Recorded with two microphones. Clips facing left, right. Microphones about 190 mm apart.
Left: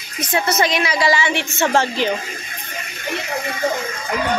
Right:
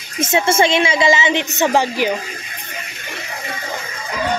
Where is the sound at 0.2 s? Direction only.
25° right (ahead or behind).